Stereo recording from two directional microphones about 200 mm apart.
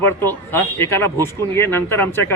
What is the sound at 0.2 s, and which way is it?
Speech, 10° left (ahead or behind).